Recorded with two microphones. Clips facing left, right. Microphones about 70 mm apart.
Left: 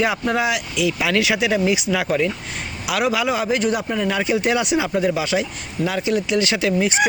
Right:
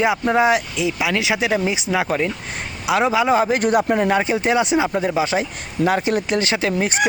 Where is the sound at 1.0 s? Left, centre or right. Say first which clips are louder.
Even; centre.